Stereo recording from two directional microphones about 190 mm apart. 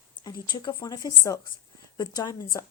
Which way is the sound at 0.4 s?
25° left (ahead or behind).